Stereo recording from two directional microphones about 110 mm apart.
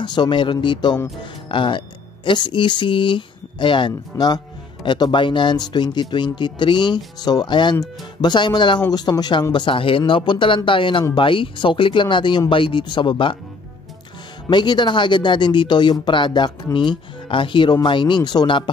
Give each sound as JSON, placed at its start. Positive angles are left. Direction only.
{"t": 0.0, "sound": "speech", "side_deg": 45}
{"t": 14.5, "sound": "speech", "side_deg": 45}